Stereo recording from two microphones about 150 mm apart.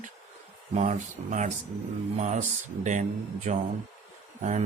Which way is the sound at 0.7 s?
55° right (ahead or behind).